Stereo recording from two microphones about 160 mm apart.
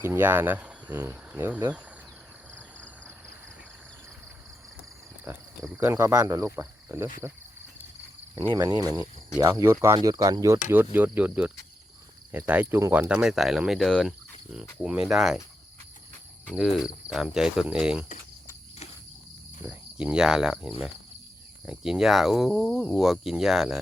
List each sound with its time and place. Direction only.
0.0 s speech: 15° right (ahead or behind)
5.6 s speech: 10° right (ahead or behind)
8.4 s speech: 25° right (ahead or behind); by 15.4 s centre (ahead or behind)
16.6 s speech: centre (ahead or behind)
19.6 s speech: 5° right (ahead or behind)